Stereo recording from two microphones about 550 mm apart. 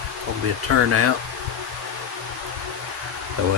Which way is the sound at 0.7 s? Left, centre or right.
Right.